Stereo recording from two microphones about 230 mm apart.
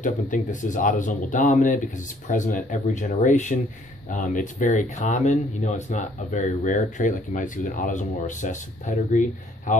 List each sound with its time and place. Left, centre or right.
0.0 s speech: left